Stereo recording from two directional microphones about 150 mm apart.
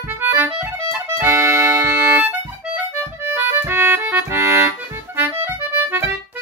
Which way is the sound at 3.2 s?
15° right (ahead or behind).